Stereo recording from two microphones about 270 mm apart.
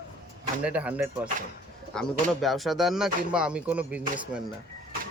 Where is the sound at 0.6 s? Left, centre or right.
Centre.